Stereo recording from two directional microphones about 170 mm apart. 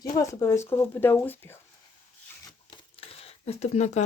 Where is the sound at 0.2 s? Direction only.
20° left (ahead or behind).